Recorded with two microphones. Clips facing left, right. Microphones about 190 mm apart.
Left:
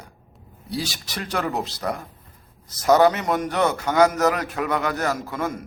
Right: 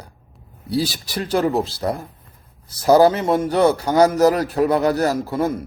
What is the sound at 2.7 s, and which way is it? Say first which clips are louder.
A man's voice: right 3 dB; 30° right (ahead or behind).